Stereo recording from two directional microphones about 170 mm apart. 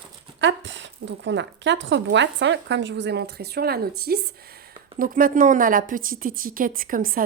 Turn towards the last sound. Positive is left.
turn(degrees=-55)  # may be behind; listen again after turning